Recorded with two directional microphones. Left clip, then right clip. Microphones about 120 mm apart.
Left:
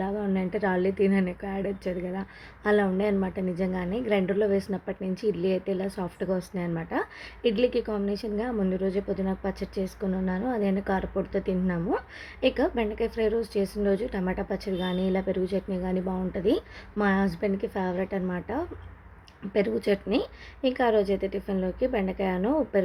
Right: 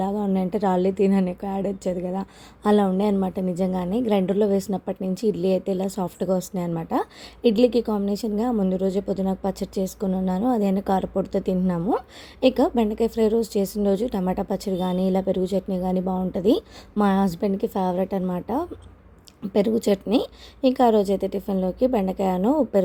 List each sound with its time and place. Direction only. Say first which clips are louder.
0.0 s a woman's voice: right 4 dB; 40° right (ahead or behind)